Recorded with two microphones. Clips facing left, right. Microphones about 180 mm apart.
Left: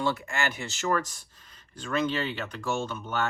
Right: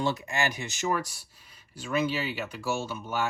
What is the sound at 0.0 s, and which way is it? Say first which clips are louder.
Speech: even; 20° right (ahead or behind).